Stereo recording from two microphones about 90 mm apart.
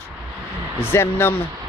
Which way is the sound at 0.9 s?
25° left (ahead or behind).